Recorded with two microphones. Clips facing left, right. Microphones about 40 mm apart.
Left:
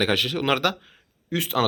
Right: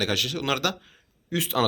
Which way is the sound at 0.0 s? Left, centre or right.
Centre.